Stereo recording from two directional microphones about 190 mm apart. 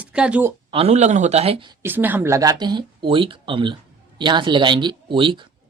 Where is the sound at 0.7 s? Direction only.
30° right (ahead or behind).